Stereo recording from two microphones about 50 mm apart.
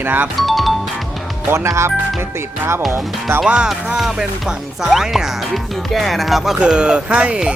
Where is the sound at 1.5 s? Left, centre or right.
Right.